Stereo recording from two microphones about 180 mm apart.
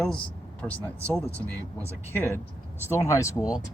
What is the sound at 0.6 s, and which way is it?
Speech, 15° left (ahead or behind).